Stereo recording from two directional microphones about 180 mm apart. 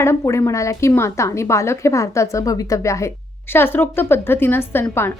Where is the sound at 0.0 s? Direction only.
15° left (ahead or behind).